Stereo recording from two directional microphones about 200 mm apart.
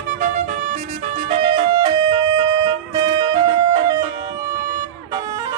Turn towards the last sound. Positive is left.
turn(degrees=-20)  # may be behind; listen again after turning